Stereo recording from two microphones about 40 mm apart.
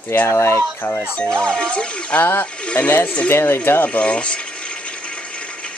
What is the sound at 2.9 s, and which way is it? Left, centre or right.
Speech, left.